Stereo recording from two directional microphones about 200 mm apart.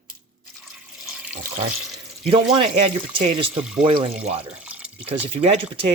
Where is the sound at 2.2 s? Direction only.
25° right (ahead or behind).